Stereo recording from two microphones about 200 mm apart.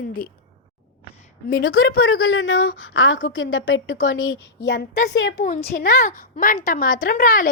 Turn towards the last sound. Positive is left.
turn(degrees=40)  # may be behind; listen again after turning